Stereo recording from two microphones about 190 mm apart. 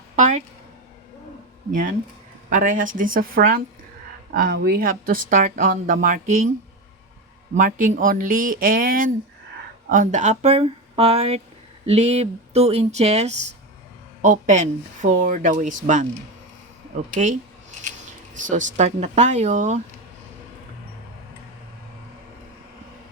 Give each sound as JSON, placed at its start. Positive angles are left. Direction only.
{"t": 0.2, "sound": "speech", "side_deg": -35}
{"t": 1.7, "sound": "speech", "side_deg": -45}
{"t": 7.5, "sound": "speech", "side_deg": -45}
{"t": 18.4, "sound": "speech", "side_deg": -40}